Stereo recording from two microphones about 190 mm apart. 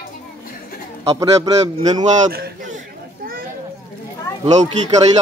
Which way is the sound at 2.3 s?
55° right (ahead or behind).